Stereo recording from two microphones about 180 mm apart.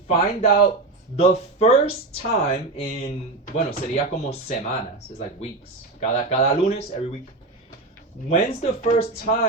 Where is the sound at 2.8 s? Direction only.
60° left (ahead or behind).